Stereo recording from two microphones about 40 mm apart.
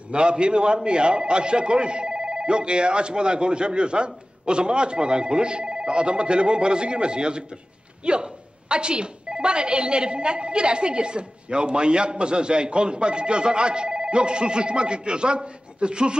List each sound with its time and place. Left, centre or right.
0.1 s a woman's voice: right